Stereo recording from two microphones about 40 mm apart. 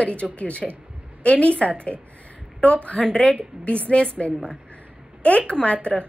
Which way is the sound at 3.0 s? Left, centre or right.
Left.